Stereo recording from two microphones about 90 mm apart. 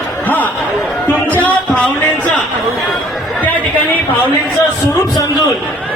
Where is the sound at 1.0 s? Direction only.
15° left (ahead or behind).